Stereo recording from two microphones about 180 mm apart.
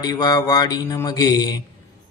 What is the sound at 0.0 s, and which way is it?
Speech, 20° left (ahead or behind).